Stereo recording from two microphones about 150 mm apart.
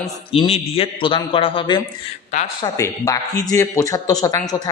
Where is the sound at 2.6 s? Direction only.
20° left (ahead or behind).